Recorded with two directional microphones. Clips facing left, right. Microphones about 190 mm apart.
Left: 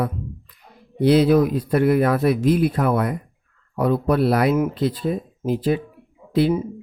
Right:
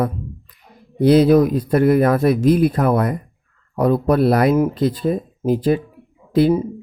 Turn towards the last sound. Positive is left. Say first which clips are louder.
# right 4 dB
turn(degrees=-45)  # may be behind; listen again after turning